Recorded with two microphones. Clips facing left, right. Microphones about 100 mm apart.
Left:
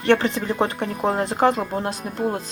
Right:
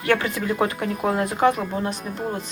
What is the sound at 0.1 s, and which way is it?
Speech, 25° left (ahead or behind).